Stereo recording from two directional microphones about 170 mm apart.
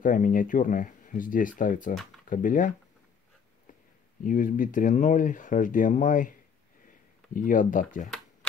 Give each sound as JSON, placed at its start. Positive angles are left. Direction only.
{"t": 0.0, "sound": "speech", "side_deg": 50}
{"t": 4.2, "sound": "speech", "side_deg": 50}
{"t": 7.3, "sound": "speech", "side_deg": 50}